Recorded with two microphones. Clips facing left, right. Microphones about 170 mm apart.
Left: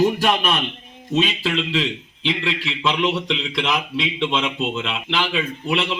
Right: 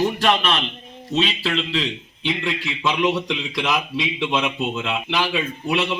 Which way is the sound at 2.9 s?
10° right (ahead or behind).